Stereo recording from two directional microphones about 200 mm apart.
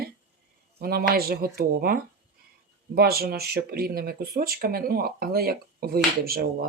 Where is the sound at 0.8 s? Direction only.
50° right (ahead or behind).